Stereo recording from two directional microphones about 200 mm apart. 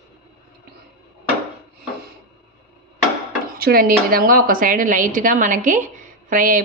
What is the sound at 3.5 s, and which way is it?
Speech, 50° right (ahead or behind).